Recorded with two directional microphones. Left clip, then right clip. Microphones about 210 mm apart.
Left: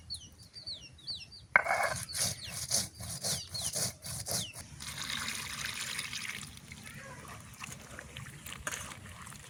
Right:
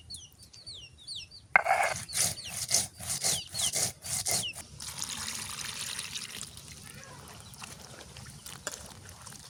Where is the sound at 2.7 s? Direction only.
15° right (ahead or behind).